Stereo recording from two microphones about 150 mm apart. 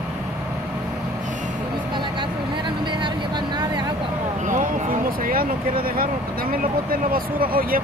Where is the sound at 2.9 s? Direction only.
30° right (ahead or behind).